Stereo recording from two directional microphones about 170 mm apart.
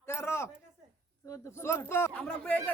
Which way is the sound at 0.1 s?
15° left (ahead or behind).